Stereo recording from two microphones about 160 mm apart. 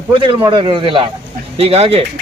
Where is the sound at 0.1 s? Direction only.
30° right (ahead or behind).